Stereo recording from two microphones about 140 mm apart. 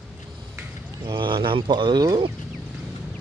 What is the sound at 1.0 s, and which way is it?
Speech, 35° right (ahead or behind).